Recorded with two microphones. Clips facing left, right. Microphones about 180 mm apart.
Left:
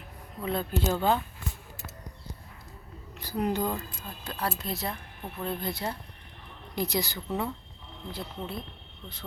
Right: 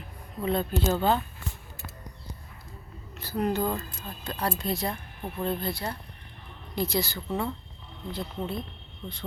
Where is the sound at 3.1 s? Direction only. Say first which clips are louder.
Right 1 dB; 15° left (ahead or behind).